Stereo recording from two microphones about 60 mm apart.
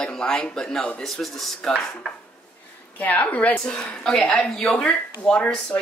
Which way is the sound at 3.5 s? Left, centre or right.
Centre.